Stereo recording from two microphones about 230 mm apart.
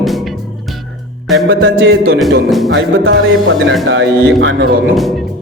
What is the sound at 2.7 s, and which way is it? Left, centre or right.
Speech, right.